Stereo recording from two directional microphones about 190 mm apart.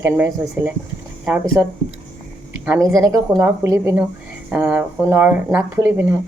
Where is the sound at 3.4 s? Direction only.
15° right (ahead or behind).